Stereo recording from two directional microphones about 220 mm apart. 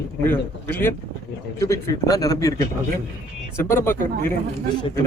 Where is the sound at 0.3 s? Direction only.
10° left (ahead or behind).